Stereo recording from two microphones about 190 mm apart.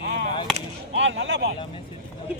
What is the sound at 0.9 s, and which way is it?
Speech, 75° right (ahead or behind).